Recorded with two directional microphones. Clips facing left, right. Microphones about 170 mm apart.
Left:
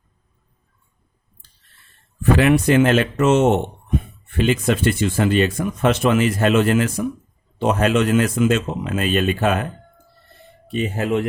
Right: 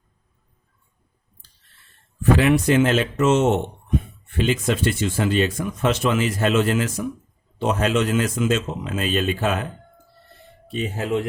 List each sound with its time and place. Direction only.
2.4 s speech: 60° left (ahead or behind)
10.7 s speech: 65° left (ahead or behind)